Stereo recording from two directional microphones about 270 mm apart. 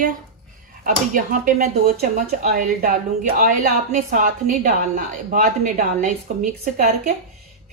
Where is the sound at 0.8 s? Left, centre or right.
Right.